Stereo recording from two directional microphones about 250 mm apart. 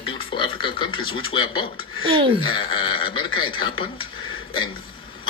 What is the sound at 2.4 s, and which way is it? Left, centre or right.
Speech, centre.